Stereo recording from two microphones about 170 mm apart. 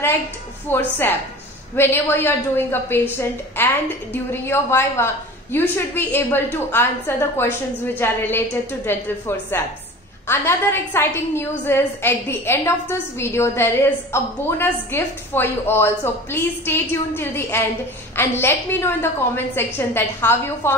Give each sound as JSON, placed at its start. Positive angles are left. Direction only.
{"t": 0.7, "sound": "a woman's voice", "side_deg": 15}
{"t": 10.2, "sound": "a woman's voice", "side_deg": 15}